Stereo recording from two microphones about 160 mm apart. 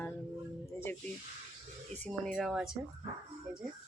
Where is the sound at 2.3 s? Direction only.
Centre (ahead or behind).